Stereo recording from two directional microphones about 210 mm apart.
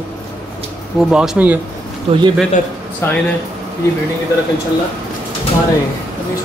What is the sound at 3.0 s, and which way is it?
Speech, 10° left (ahead or behind).